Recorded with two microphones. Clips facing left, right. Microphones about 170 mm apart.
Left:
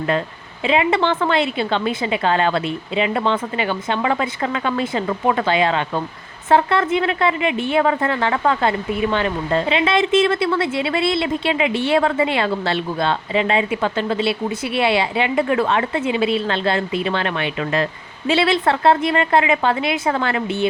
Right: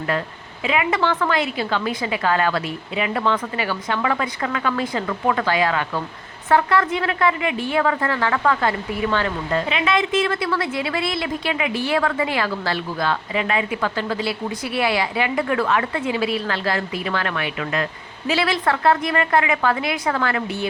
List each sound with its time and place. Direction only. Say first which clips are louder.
0.6 s a woman's voice: left 3 dB; 25° left (ahead or behind)